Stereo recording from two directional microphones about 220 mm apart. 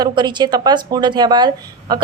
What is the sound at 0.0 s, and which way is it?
A woman's voice, 20° right (ahead or behind).